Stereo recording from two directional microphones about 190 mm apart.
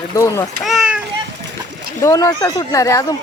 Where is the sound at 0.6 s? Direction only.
Centre (ahead or behind).